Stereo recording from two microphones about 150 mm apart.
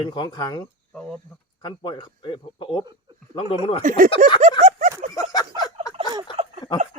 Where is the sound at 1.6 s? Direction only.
30° left (ahead or behind).